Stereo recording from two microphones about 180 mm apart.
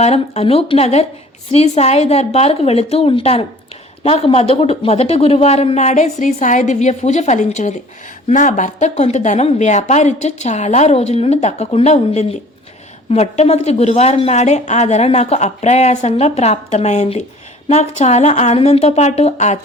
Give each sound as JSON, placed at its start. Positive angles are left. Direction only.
{"t": 0.0, "sound": "a woman's voice", "side_deg": 35}